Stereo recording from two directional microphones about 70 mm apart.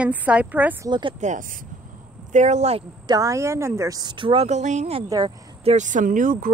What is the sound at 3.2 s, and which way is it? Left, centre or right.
Speech, right.